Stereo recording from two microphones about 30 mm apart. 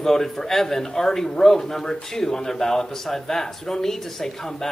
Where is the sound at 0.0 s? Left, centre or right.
Centre.